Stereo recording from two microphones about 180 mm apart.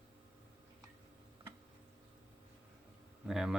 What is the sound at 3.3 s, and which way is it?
Speech, centre (ahead or behind).